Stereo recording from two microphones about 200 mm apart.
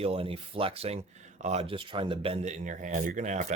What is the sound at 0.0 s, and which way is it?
Speech, 30° right (ahead or behind).